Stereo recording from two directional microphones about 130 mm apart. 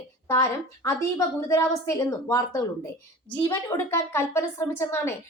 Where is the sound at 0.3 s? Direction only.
25° left (ahead or behind).